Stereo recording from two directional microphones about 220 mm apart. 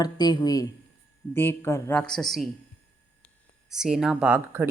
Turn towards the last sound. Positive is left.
turn(degrees=-10)  # may be behind; listen again after turning